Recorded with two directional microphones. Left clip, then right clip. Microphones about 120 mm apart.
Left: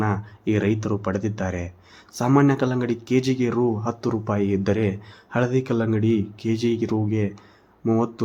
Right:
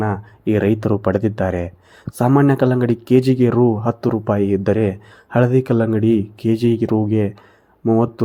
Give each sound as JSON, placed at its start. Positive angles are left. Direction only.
{"t": 0.0, "sound": "speech", "side_deg": -30}